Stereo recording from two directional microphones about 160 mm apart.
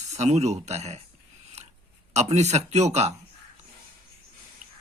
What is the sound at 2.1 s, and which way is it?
Speech, 45° right (ahead or behind).